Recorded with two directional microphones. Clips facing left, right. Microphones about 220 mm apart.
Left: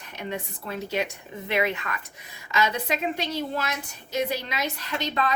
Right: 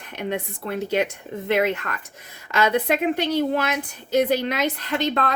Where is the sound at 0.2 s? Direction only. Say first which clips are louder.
Right 6 dB; 60° right (ahead or behind).